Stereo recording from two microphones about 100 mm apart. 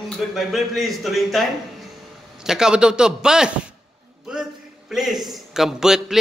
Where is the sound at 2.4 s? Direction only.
5° right (ahead or behind).